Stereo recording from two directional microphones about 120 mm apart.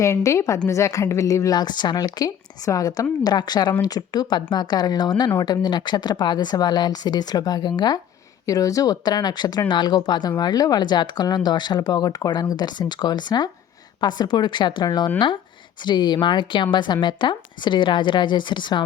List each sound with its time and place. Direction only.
0.0 s a woman's voice: 25° left (ahead or behind)